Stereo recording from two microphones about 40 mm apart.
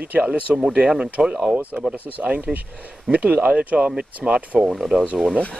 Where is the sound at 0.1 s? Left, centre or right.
Right.